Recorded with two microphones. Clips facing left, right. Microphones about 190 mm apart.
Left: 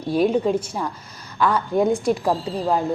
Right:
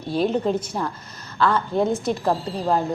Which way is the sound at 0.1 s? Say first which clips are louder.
Left 2 dB; 10° left (ahead or behind).